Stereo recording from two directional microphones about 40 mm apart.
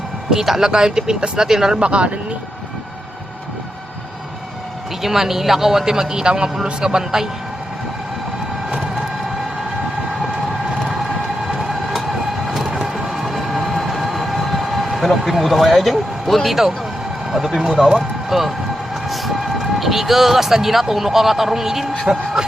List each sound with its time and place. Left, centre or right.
0.3 s speech: centre
1.8 s speech: right
5.0 s speech: centre
11.4 s vehicle: centre
12.9 s train: centre
17.3 s speech: centre